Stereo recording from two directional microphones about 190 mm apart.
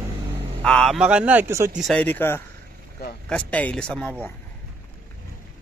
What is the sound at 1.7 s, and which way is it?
Speech, centre (ahead or behind).